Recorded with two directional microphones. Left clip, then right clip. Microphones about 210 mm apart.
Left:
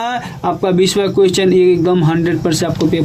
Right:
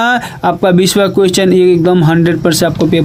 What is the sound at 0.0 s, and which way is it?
Speech, 35° right (ahead or behind).